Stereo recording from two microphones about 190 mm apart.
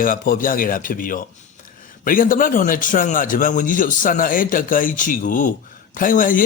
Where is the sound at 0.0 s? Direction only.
45° left (ahead or behind).